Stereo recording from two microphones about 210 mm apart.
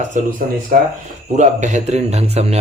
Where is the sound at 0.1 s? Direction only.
40° right (ahead or behind).